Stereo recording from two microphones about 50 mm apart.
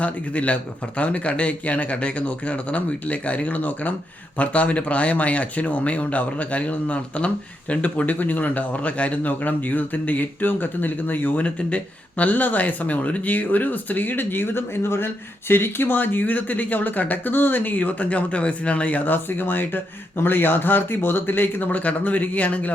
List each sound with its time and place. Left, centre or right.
0.0 s a man's voice: left